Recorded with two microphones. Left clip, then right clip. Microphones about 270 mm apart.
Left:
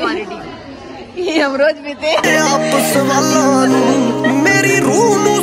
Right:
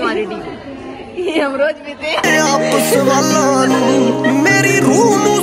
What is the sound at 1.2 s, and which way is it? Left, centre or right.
Speech, left.